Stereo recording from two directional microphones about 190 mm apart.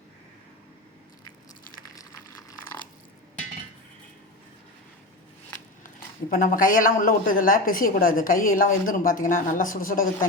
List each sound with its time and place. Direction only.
6.3 s a woman's voice: 45° left (ahead or behind)